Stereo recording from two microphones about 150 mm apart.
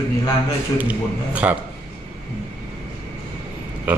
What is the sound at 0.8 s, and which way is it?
Speech, 10° right (ahead or behind).